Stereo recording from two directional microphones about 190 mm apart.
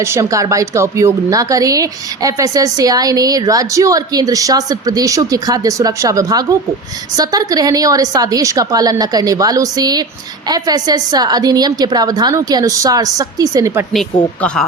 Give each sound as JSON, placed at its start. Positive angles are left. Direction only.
{"t": 0.0, "sound": "a woman's voice", "side_deg": -15}